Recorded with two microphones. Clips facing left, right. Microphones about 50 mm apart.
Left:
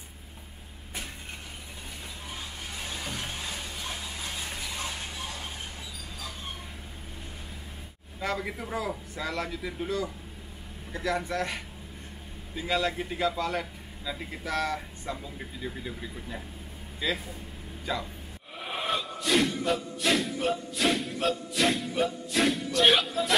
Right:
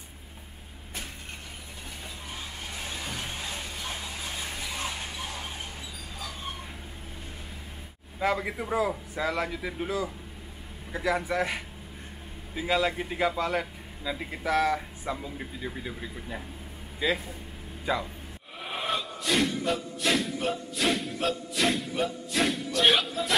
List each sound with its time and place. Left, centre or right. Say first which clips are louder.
2.3 s a sound: right 1 dB; centre
8.2 s speech: right 4 dB; centre
18.6 s music: even; centre